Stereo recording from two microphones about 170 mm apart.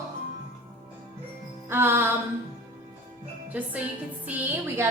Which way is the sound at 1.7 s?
15° right (ahead or behind).